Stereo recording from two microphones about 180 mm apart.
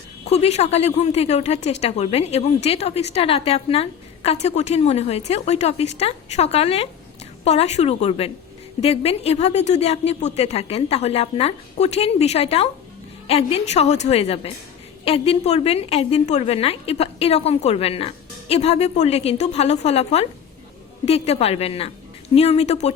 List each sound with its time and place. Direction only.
0.3 s a woman's voice: 35° left (ahead or behind)